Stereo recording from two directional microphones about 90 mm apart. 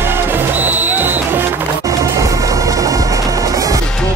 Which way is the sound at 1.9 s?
35° right (ahead or behind).